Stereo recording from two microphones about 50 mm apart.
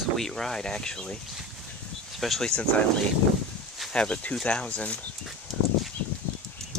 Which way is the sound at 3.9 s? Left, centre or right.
Left.